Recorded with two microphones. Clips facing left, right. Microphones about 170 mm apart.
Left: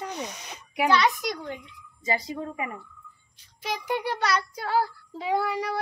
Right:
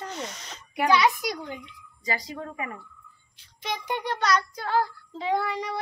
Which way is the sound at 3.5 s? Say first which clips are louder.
Left 2 dB; 5° left (ahead or behind).